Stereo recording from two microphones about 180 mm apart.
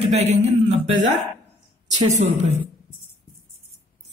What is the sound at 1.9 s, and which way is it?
Speech, 40° right (ahead or behind).